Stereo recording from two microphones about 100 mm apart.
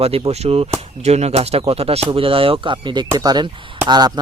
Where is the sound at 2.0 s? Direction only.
65° right (ahead or behind).